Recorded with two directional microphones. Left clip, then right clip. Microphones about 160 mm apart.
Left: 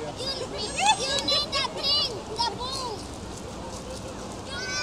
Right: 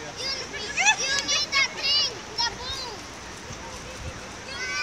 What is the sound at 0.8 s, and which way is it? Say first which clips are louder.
Children playing: right 1 dB; 25° right (ahead or behind).